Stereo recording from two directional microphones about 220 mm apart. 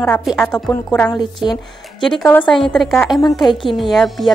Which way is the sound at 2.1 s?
5° left (ahead or behind).